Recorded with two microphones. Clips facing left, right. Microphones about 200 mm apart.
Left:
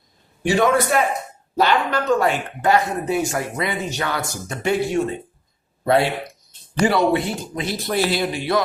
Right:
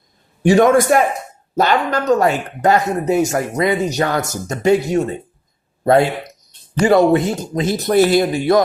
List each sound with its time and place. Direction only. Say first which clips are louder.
0.4 s speech: right 6 dB; 45° right (ahead or behind)